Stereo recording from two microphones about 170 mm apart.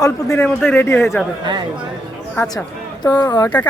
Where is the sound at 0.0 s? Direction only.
20° left (ahead or behind).